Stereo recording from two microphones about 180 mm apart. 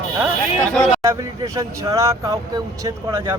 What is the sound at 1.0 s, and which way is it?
Speech, 15° right (ahead or behind).